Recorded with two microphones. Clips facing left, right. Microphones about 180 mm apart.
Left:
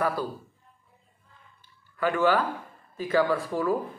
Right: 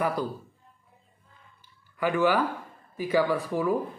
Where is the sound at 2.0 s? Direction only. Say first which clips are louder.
Even; 15° right (ahead or behind).